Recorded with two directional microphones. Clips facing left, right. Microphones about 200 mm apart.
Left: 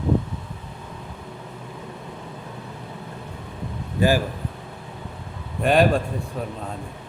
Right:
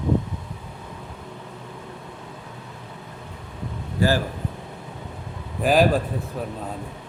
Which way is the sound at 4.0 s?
20° left (ahead or behind).